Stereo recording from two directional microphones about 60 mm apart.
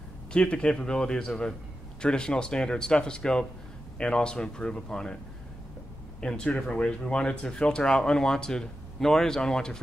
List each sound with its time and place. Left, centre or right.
0.3 s speech: centre
6.2 s speech: centre